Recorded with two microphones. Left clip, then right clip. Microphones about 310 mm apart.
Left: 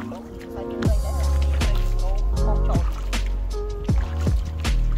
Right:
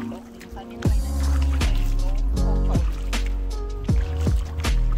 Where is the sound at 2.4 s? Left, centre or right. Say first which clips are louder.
Left 2 dB; centre.